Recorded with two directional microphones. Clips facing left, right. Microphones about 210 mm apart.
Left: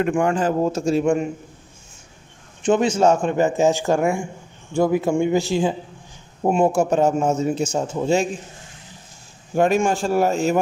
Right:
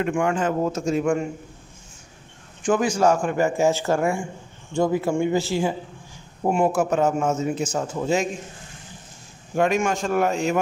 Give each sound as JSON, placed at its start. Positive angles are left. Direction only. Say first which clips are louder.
{"t": 0.0, "sound": "a man's voice", "louder": "left 3 dB", "side_deg": 40}
{"t": 2.6, "sound": "a man's voice", "louder": "left 3 dB", "side_deg": 25}
{"t": 9.6, "sound": "a man's voice", "louder": "left 3 dB", "side_deg": 35}